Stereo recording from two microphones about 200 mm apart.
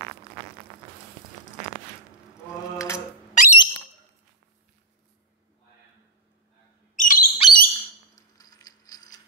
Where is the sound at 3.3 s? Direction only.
35° left (ahead or behind).